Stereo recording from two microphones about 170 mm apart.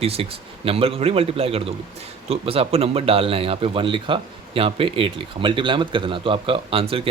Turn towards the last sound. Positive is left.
turn(degrees=-35)  # may be behind; listen again after turning